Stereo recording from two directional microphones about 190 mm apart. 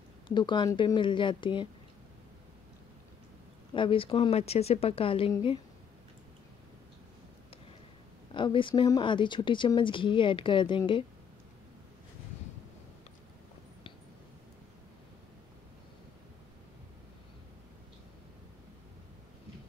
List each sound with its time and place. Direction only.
0.3 s speech: 25° left (ahead or behind)
3.7 s speech: 25° left (ahead or behind)
8.3 s speech: 25° left (ahead or behind)